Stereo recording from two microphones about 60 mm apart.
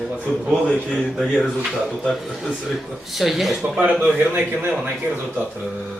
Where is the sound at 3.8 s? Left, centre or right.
Right.